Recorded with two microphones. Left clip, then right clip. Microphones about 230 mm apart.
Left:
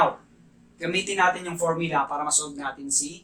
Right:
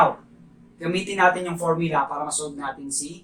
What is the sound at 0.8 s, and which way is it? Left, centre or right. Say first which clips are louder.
Speech: even; left.